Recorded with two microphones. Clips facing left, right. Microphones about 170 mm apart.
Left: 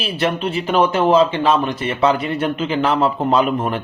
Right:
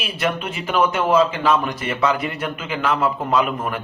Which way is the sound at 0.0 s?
30° left (ahead or behind).